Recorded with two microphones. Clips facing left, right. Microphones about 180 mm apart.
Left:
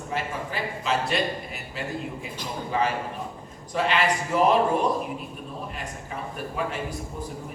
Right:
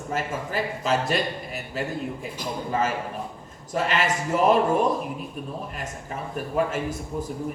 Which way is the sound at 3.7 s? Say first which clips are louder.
Left 1 dB; 45° right (ahead or behind).